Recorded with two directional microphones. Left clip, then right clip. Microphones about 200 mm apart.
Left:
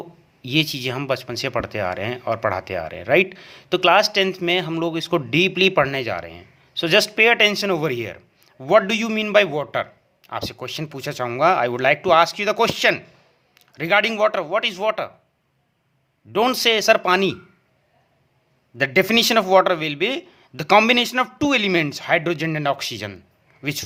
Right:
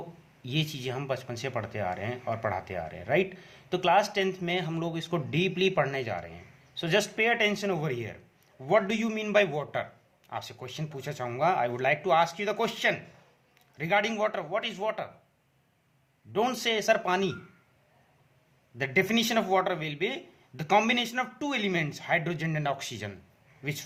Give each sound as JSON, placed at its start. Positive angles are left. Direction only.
{"t": 0.4, "sound": "speech", "side_deg": 35}
{"t": 16.3, "sound": "speech", "side_deg": 35}
{"t": 18.8, "sound": "speech", "side_deg": 40}